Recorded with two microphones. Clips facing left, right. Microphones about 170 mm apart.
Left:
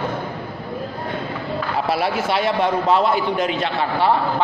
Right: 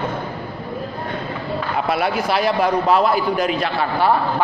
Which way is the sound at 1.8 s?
30° left (ahead or behind).